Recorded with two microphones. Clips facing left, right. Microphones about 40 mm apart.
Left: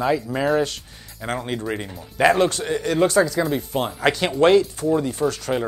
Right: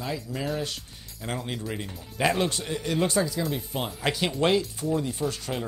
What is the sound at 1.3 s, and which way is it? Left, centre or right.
Speech, left.